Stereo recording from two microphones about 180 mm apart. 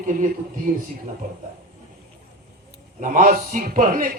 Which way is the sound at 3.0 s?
45° right (ahead or behind).